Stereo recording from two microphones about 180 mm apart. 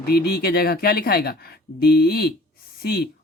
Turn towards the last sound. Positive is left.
turn(degrees=60)  # may be behind; listen again after turning